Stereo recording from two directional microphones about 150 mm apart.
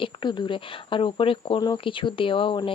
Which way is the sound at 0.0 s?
30° left (ahead or behind).